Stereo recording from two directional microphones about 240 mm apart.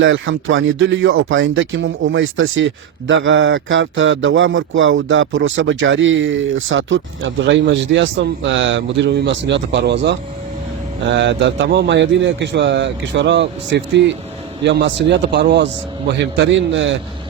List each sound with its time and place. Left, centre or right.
0.0 s speech: right